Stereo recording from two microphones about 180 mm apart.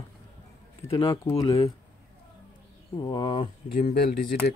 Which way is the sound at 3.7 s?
55° left (ahead or behind).